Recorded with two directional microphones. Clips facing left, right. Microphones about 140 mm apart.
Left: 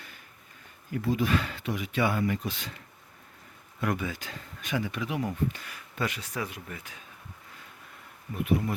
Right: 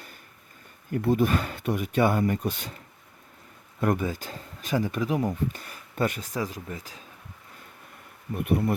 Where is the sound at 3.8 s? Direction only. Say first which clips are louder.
Right 5 dB; 45° right (ahead or behind).